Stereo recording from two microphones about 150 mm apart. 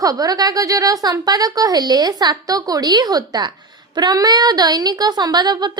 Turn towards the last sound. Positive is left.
turn(degrees=-30)  # may be behind; listen again after turning